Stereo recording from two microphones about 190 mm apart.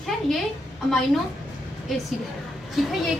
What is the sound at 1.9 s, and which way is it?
A woman's voice, centre (ahead or behind).